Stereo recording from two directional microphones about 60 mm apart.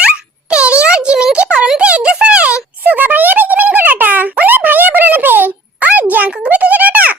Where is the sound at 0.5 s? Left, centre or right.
Centre.